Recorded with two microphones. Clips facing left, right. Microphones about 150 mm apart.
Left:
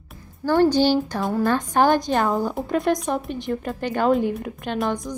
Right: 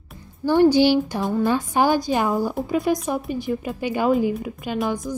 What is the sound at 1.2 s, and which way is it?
A woman's voice, centre (ahead or behind).